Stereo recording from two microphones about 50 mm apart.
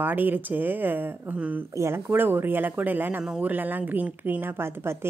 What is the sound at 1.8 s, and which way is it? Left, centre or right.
Speech, right.